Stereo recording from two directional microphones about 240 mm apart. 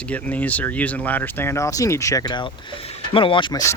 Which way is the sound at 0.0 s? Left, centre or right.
Centre.